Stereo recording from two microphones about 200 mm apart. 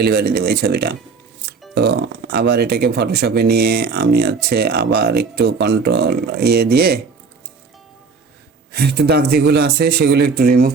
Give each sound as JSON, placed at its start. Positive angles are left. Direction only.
{"t": 0.0, "sound": "speech", "side_deg": -50}
{"t": 8.7, "sound": "speech", "side_deg": -55}